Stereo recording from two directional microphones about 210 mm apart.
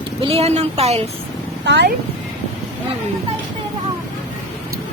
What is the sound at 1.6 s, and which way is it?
Speech, 55° right (ahead or behind).